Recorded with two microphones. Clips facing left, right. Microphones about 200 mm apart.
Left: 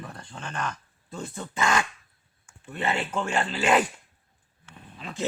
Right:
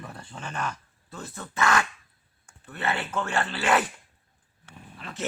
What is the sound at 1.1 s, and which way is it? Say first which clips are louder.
Speech: left 2 dB; 15° left (ahead or behind).